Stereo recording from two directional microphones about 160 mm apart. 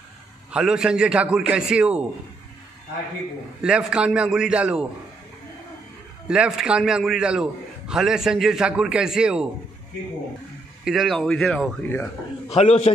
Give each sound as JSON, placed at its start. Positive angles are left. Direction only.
{"t": 0.5, "sound": "a man's voice", "side_deg": -5}
{"t": 3.6, "sound": "a man's voice", "side_deg": -5}
{"t": 6.2, "sound": "a man's voice", "side_deg": -5}
{"t": 10.8, "sound": "a man's voice", "side_deg": 0}
{"t": 12.5, "sound": "a man's voice", "side_deg": 45}